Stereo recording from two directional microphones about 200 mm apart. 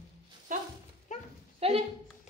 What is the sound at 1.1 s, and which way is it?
Goat, 35° left (ahead or behind).